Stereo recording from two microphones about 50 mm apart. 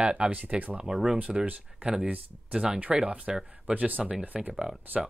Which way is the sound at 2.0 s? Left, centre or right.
Right.